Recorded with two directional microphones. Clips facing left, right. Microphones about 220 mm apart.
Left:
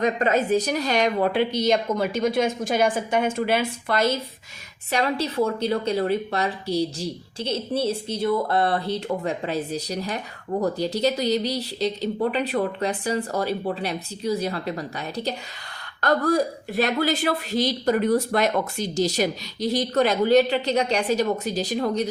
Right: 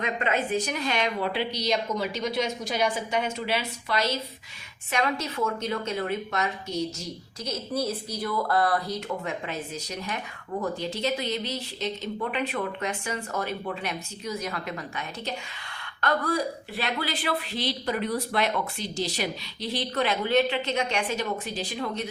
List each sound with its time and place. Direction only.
0.0 s a woman's voice: 40° left (ahead or behind)
4.9 s a woman's voice: 35° left (ahead or behind)